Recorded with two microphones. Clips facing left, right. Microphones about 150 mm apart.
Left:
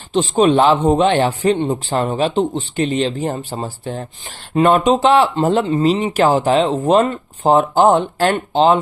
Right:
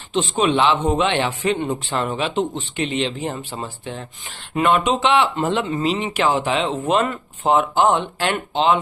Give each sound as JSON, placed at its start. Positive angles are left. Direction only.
{"t": 0.1, "sound": "speech", "side_deg": 35}